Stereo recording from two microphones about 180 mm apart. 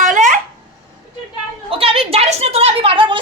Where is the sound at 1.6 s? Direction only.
30° right (ahead or behind).